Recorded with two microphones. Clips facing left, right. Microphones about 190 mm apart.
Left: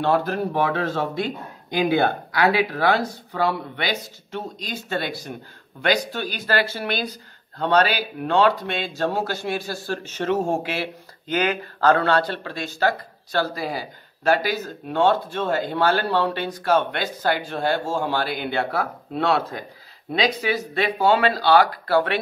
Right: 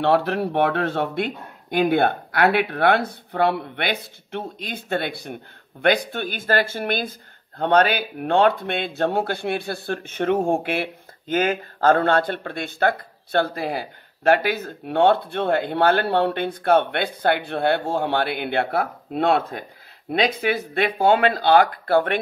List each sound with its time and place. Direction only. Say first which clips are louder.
0.0 s speech: right 2 dB; 65° right (ahead or behind); by 22.2 s 50° right (ahead or behind)